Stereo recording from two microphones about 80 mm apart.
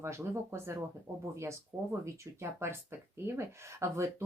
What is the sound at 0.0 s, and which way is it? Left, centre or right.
Speech, right.